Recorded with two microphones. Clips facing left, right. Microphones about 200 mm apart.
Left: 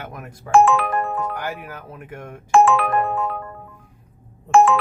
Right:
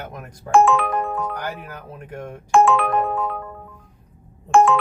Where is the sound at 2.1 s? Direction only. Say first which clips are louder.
Right 4 dB; 40° right (ahead or behind).